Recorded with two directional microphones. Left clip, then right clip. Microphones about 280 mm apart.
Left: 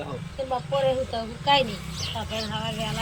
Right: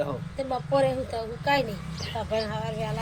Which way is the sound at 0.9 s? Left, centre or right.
Right.